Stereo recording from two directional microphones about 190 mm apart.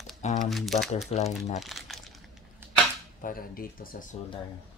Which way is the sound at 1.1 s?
35° left (ahead or behind).